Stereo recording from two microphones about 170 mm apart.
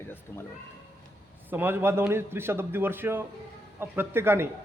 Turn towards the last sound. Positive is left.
turn(degrees=-15)  # may be behind; listen again after turning